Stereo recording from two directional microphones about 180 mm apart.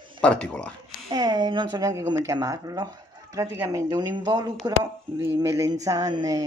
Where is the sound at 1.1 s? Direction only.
20° right (ahead or behind).